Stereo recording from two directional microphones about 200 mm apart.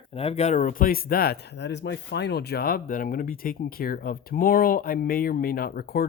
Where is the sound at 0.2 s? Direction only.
30° left (ahead or behind).